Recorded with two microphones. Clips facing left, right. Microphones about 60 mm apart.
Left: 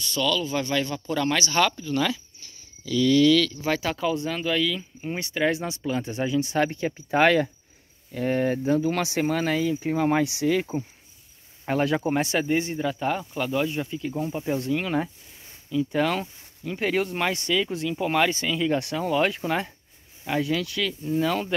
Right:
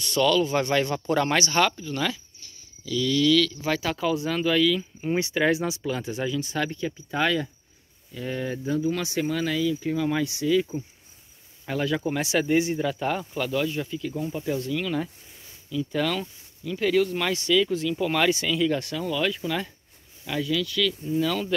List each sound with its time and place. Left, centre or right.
0.0 s speech: right
1.5 s speech: centre
2.9 s speech: left
3.3 s speech: centre
4.3 s speech: centre
5.3 s speech: centre
6.2 s speech: centre
6.6 s speech: left
9.2 s speech: left
11.6 s speech: left
12.4 s speech: centre; by 17.3 s left
17.3 s speech: centre
18.9 s speech: left